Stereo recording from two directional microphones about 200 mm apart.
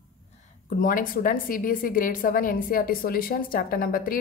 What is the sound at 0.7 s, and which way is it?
A woman's voice, 45° left (ahead or behind).